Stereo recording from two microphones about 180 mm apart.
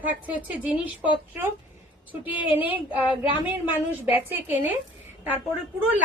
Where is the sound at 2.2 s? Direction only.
10° right (ahead or behind).